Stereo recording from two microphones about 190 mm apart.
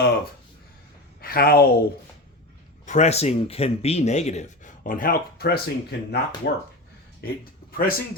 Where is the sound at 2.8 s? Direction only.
40° left (ahead or behind); by 6.6 s 60° left (ahead or behind).